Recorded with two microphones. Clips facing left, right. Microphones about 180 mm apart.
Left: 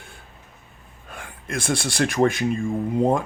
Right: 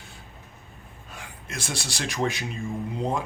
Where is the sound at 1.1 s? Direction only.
55° left (ahead or behind).